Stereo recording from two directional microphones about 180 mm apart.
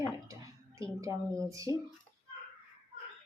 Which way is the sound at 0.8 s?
15° right (ahead or behind).